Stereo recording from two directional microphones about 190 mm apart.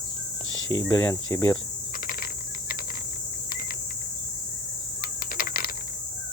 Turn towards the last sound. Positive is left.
turn(degrees=50)  # may be behind; listen again after turning